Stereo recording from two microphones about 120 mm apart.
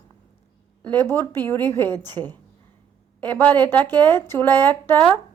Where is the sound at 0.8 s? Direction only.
15° left (ahead or behind).